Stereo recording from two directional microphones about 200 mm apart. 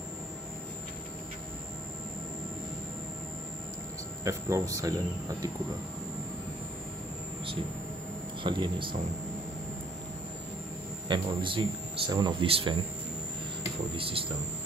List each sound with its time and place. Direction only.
4.2 s speech: 15° right (ahead or behind)
8.5 s speech: 25° right (ahead or behind)
11.1 s speech: 25° right (ahead or behind)
13.9 s speech: 25° right (ahead or behind)